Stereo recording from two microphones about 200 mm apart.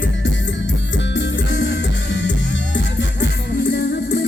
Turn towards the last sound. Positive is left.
turn(degrees=60)  # may be behind; listen again after turning